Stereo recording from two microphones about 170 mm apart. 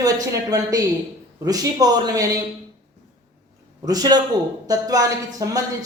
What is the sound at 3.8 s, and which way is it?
Speech, 20° right (ahead or behind).